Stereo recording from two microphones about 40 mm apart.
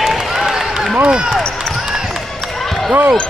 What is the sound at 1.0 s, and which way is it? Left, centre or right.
Basketball bounce, centre.